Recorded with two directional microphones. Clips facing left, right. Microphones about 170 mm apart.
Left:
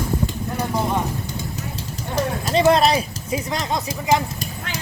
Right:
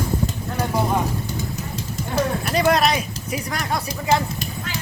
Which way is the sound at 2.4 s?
25° left (ahead or behind).